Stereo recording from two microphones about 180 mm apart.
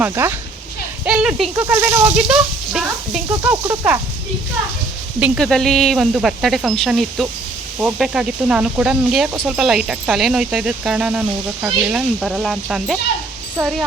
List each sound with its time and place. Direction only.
0.0 s speech: 15° right (ahead or behind)
2.1 s speech: 5° right (ahead or behind)
3.5 s speech: 15° right (ahead or behind)
5.2 s speech: centre (ahead or behind)